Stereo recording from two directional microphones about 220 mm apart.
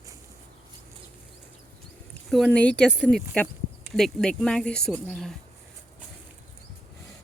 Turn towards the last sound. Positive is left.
turn(degrees=0)  # may be behind; listen again after turning